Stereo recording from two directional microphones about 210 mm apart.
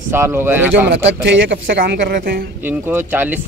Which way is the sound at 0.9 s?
55° right (ahead or behind).